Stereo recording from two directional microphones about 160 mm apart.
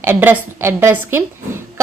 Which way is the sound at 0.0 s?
15° right (ahead or behind).